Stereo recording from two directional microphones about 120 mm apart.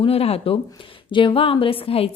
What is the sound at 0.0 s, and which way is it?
A woman's voice, 55° left (ahead or behind).